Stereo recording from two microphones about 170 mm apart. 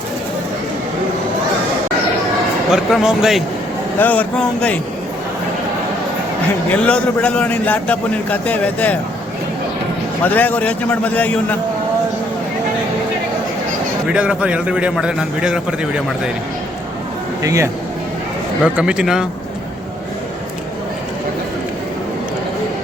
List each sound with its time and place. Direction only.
2.7 s a man's voice: 5° right (ahead or behind)
3.9 s a man's voice: 10° left (ahead or behind)
6.7 s a man's voice: 5° left (ahead or behind)
10.2 s a man's voice: 10° left (ahead or behind)
14.1 s a man's voice: 5° right (ahead or behind)
17.4 s a man's voice: 20° right (ahead or behind)
18.6 s a man's voice: 5° right (ahead or behind)